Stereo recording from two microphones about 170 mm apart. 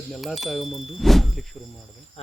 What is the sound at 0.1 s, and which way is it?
Speech, centre (ahead or behind).